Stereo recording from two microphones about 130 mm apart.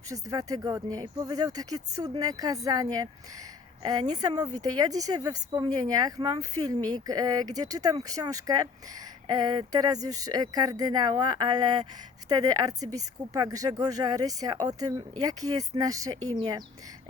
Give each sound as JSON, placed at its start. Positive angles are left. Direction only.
{"t": 0.1, "sound": "speech", "side_deg": -25}